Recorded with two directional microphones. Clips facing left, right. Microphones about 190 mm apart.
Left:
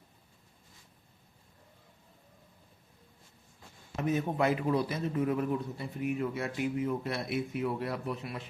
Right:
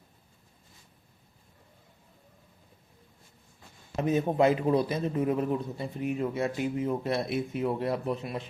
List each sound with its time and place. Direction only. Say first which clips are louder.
3.9 s a man's voice: right 5 dB; 25° right (ahead or behind)